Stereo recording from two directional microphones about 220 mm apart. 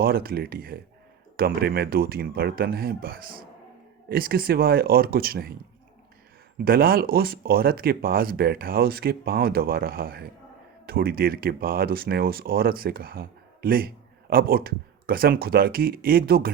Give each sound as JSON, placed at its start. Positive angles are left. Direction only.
{"t": 0.0, "sound": "speech", "side_deg": -45}
{"t": 6.6, "sound": "speech", "side_deg": -45}